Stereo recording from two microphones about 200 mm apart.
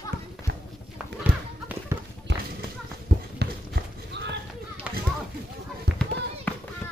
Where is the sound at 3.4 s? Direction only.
55° right (ahead or behind).